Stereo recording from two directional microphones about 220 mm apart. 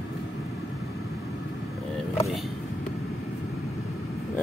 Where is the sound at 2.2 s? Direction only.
Centre (ahead or behind).